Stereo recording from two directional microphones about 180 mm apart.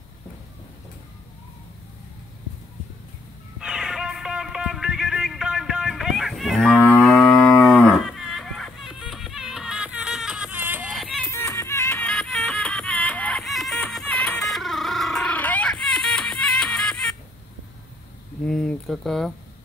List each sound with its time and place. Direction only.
3.5 s music: 5° right (ahead or behind)
6.8 s moo: 5° left (ahead or behind)
11.2 s music: 15° left (ahead or behind)
18.4 s a sound: 5° left (ahead or behind)